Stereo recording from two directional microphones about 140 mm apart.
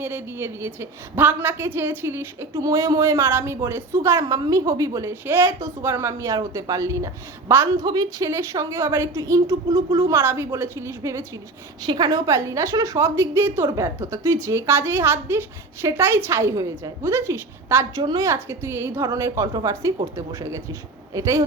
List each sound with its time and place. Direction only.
0.0 s a woman's voice: 15° right (ahead or behind)